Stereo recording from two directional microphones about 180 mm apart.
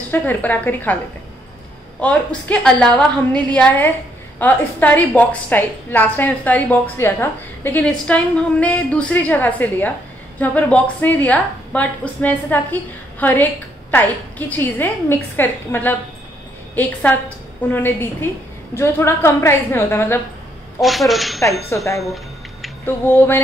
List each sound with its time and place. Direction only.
0.1 s a woman's voice: 10° left (ahead or behind)
2.0 s a woman's voice: 5° left (ahead or behind)
20.8 s speech: centre (ahead or behind)
21.4 s a woman's voice: 15° left (ahead or behind)
22.0 s a sound: centre (ahead or behind)
22.8 s a woman's voice: 10° left (ahead or behind)